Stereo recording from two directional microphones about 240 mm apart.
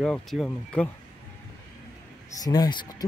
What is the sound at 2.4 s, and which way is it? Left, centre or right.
Speech, centre.